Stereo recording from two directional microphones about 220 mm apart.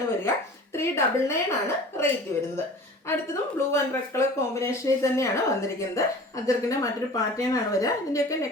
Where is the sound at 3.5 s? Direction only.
10° left (ahead or behind).